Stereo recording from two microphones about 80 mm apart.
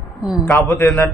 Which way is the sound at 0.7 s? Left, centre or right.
Left.